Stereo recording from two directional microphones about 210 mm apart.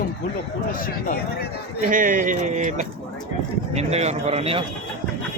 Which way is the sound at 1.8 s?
40° right (ahead or behind).